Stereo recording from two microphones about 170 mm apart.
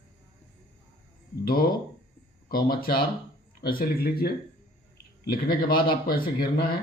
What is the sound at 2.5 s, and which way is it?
Speech, 60° left (ahead or behind).